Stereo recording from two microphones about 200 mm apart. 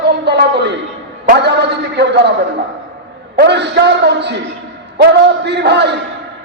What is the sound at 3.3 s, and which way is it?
A man's voice, 55° right (ahead or behind).